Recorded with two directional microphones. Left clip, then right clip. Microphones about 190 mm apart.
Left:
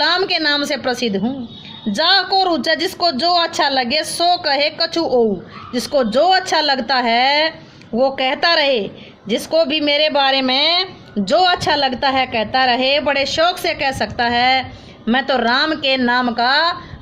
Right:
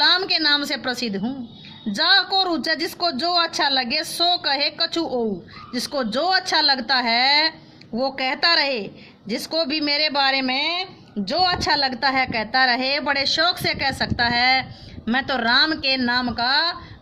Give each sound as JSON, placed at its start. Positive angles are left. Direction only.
{"t": 0.0, "sound": "a woman's voice", "side_deg": -10}
{"t": 11.6, "sound": "a woman's voice", "side_deg": -10}